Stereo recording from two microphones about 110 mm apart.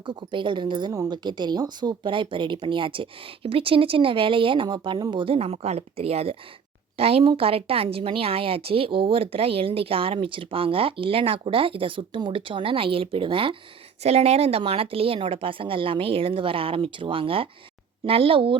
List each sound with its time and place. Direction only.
0.0 s a woman's voice: 45° right (ahead or behind)
5.2 s a woman's voice: 60° right (ahead or behind)
14.0 s a woman's voice: 75° right (ahead or behind); by 18.5 s 55° right (ahead or behind)